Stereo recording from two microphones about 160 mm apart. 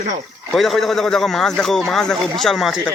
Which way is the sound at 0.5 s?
Centre (ahead or behind).